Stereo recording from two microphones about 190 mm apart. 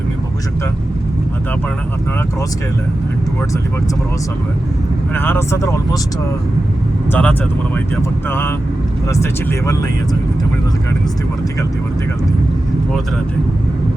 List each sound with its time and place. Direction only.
5.1 s speech: 10° left (ahead or behind)
7.1 s speech: 5° left (ahead or behind)